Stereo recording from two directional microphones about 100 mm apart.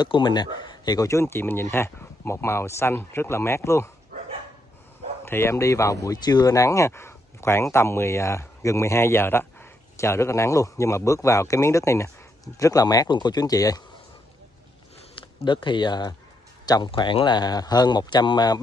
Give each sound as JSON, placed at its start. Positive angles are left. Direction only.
{"t": 0.0, "sound": "speech", "side_deg": 50}
{"t": 5.2, "sound": "speech", "side_deg": 25}
{"t": 15.1, "sound": "speech", "side_deg": 50}